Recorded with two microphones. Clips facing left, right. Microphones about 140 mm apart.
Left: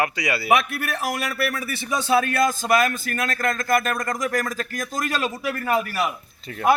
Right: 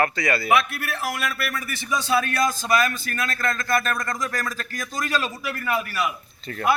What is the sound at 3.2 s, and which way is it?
Speech, 20° left (ahead or behind).